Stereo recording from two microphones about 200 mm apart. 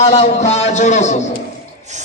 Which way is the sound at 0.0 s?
35° left (ahead or behind).